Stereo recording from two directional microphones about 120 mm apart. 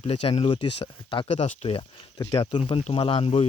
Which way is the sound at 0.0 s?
50° left (ahead or behind).